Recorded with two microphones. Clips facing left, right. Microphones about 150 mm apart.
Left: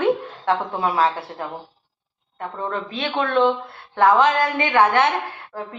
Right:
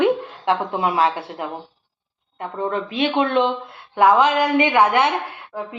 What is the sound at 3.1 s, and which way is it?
A woman's voice, 15° right (ahead or behind).